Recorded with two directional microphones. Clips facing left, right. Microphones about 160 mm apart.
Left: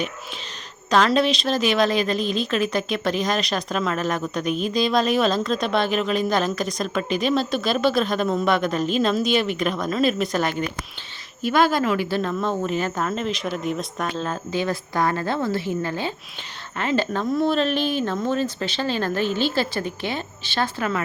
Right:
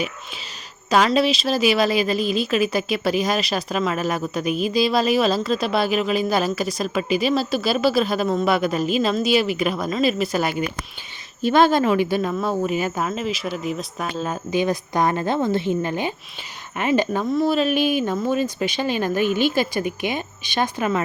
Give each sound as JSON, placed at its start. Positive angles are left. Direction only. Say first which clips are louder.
{"t": 0.9, "sound": "a woman's voice", "louder": "right 1 dB", "side_deg": -10}
{"t": 11.4, "sound": "a woman's voice", "louder": "right 3 dB", "side_deg": -25}
{"t": 17.2, "sound": "a woman's voice", "louder": "right 1 dB", "side_deg": 0}